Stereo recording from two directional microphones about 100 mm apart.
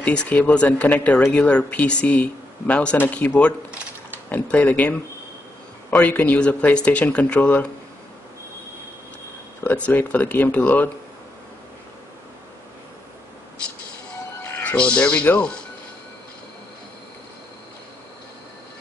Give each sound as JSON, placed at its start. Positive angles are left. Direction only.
{"t": 0.0, "sound": "speech", "side_deg": 10}
{"t": 9.8, "sound": "speech", "side_deg": 15}
{"t": 14.4, "sound": "speech", "side_deg": 15}